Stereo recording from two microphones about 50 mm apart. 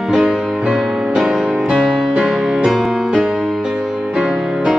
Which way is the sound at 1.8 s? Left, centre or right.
Centre.